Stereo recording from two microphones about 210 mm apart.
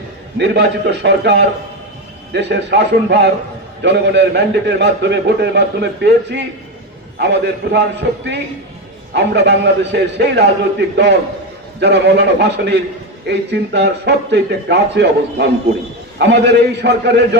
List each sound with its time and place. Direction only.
0.3 s a man's voice: 55° right (ahead or behind)